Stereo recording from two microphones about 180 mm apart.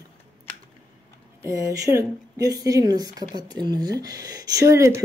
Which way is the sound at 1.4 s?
15° right (ahead or behind).